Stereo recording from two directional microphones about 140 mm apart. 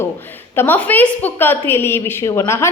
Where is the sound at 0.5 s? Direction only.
15° left (ahead or behind).